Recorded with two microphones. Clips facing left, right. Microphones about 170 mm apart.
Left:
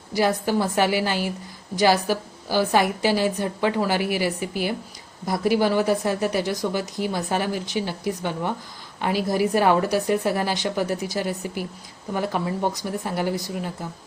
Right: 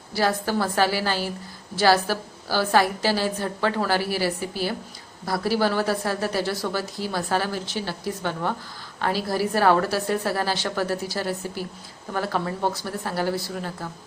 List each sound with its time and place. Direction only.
0.1 s a woman's voice: 15° left (ahead or behind)